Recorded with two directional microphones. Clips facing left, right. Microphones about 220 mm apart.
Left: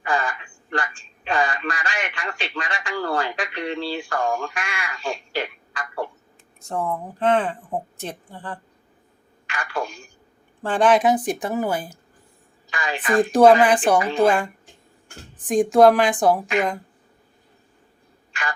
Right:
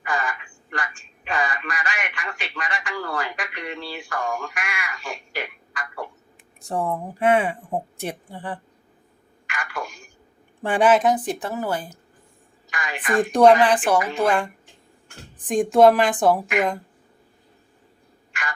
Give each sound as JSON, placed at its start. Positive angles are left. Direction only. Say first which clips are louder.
{"t": 0.0, "sound": "telephone", "louder": "left 3 dB", "side_deg": 30}
{"t": 6.7, "sound": "speech", "louder": "right 1 dB", "side_deg": -15}
{"t": 9.5, "sound": "a sound", "louder": "left 4 dB", "side_deg": 30}
{"t": 10.6, "sound": "a woman's voice", "louder": "even", "side_deg": -10}
{"t": 11.3, "sound": "speech", "louder": "left 3 dB", "side_deg": 15}
{"t": 12.7, "sound": "a sound", "louder": "left 3 dB", "side_deg": 30}
{"t": 13.3, "sound": "speech", "louder": "left 1 dB", "side_deg": 10}
{"t": 14.0, "sound": "a woman's voice", "louder": "left 4 dB", "side_deg": 30}
{"t": 15.4, "sound": "a woman's voice", "louder": "left 1 dB", "side_deg": 0}